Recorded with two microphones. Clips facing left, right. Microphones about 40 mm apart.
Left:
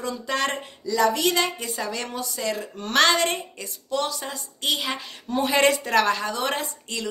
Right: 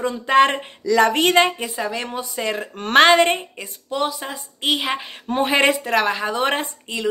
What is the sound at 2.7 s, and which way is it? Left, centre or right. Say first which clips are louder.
Speech: right 10 dB; right.